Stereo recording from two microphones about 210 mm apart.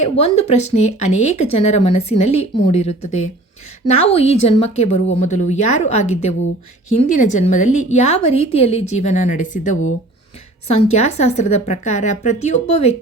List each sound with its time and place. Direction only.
0.0 s speech: 30° left (ahead or behind)